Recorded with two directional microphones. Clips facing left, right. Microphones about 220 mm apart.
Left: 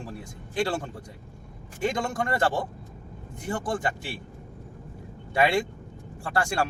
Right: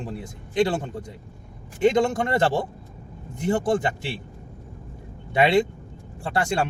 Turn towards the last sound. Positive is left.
turn(degrees=-20)  # may be behind; listen again after turning